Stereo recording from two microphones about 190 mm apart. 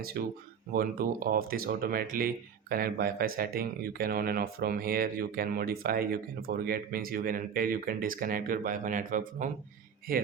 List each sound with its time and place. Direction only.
0.2 s speech: 55° right (ahead or behind)